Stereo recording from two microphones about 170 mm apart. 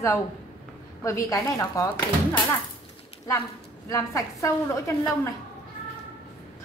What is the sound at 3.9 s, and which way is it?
A woman's voice, 15° left (ahead or behind).